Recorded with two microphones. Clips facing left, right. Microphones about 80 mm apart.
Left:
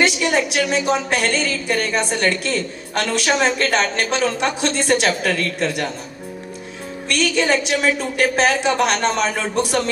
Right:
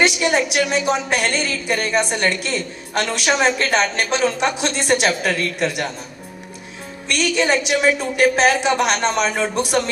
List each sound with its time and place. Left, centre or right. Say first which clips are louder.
0.0 s a woman's voice: right 1 dB; centre
7.1 s a woman's voice: even; centre